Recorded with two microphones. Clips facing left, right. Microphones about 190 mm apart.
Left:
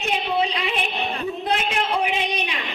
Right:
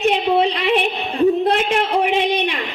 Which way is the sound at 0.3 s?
65° right (ahead or behind).